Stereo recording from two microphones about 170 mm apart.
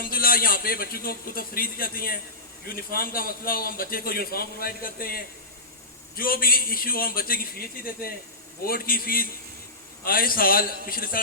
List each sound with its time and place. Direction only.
0.1 s a man's voice: 60° left (ahead or behind)
8.6 s a man's voice: 60° left (ahead or behind)